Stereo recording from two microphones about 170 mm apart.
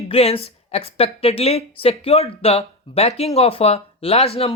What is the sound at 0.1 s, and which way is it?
A woman's voice, 35° left (ahead or behind).